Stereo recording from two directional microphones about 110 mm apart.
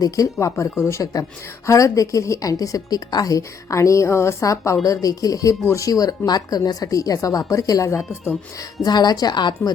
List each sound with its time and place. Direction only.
0.0 s a woman's voice: 30° left (ahead or behind)
8.8 s speech: 40° left (ahead or behind)